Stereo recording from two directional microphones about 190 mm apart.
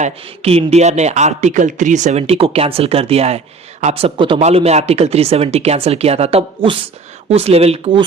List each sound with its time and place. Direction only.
0.0 s speech: 35° right (ahead or behind)